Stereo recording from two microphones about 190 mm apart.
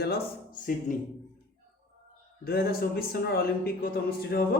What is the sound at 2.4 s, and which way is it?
Speech, 55° left (ahead or behind).